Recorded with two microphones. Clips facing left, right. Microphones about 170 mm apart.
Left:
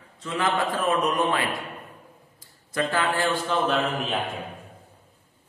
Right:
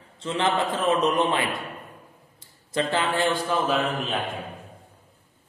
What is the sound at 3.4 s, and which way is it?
Speech, 5° right (ahead or behind).